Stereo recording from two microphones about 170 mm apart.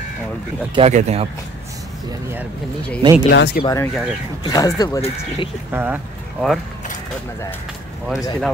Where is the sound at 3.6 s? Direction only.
15° left (ahead or behind).